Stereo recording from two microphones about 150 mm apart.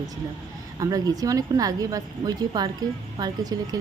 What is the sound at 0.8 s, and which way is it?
Speech, 25° right (ahead or behind).